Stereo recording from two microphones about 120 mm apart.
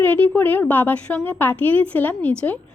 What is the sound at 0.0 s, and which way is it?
A woman's voice, 15° left (ahead or behind).